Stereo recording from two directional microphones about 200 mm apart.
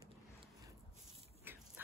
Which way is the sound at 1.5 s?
10° right (ahead or behind).